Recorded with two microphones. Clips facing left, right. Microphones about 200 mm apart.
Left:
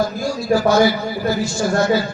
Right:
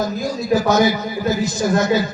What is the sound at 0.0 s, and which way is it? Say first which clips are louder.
A man's voice: left 1 dB; 20° right (ahead or behind).